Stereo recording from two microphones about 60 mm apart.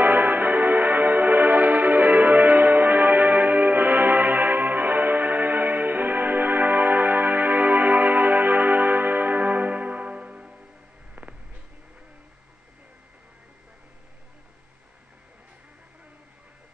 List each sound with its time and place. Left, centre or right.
0.0 s music: right